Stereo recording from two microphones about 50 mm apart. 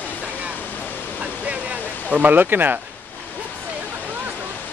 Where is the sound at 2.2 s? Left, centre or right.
Right.